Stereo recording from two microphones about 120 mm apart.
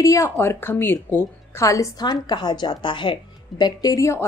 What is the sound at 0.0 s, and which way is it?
A woman's voice, 25° left (ahead or behind).